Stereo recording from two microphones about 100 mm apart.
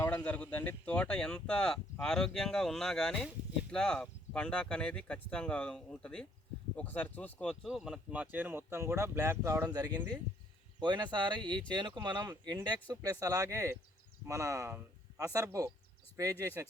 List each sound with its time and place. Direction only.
0.3 s speech: 15° left (ahead or behind)
7.3 s speech: centre (ahead or behind); by 16.6 s 30° right (ahead or behind)